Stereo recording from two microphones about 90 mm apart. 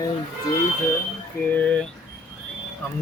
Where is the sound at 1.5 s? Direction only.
15° left (ahead or behind).